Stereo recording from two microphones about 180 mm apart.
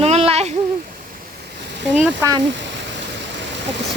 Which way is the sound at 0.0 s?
35° right (ahead or behind).